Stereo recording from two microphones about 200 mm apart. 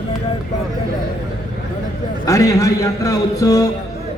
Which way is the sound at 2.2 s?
15° left (ahead or behind).